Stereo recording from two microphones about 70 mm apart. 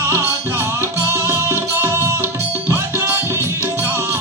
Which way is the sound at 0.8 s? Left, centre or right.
Right.